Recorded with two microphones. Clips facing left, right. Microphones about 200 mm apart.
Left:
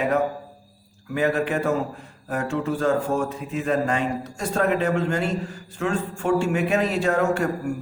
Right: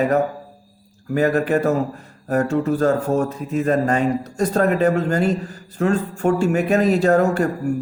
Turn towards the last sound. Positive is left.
turn(degrees=-35)  # may be behind; listen again after turning